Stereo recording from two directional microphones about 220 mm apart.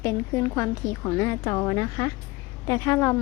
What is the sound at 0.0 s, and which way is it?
A woman's voice, 10° left (ahead or behind).